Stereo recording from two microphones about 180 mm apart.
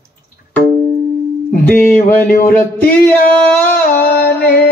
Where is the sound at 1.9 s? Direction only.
55° left (ahead or behind).